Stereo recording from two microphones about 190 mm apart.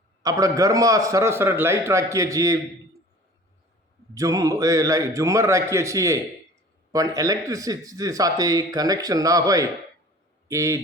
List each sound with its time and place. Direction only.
0.2 s a man's voice: 20° right (ahead or behind)
4.1 s a man's voice: 15° right (ahead or behind)